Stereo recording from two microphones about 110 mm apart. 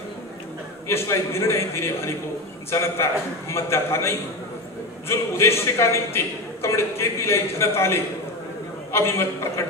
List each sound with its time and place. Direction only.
0.8 s a man's voice: 25° left (ahead or behind)